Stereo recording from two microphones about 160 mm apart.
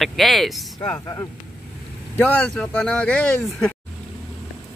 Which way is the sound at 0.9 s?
15° left (ahead or behind).